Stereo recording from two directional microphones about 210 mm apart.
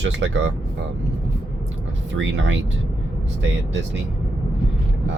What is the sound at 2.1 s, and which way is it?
Speech, 60° right (ahead or behind).